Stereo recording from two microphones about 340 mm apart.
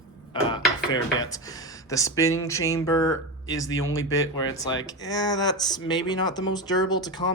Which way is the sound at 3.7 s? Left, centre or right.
Left.